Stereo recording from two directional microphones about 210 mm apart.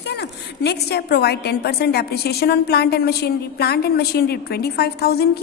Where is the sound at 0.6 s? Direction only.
50° left (ahead or behind).